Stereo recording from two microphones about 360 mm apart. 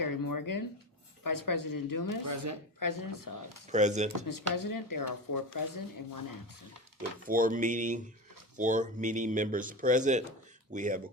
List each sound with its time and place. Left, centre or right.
0.0 s a sound: left
1.2 s speech: left
2.2 s speech: right
2.7 s speech: left
3.7 s speech: centre
4.3 s speech: left
7.3 s speech: right